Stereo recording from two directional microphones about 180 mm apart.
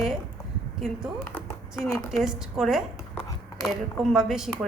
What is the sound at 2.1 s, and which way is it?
A woman's voice, centre (ahead or behind).